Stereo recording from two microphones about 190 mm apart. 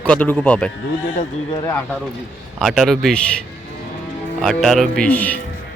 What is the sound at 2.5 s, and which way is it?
Speech, centre (ahead or behind).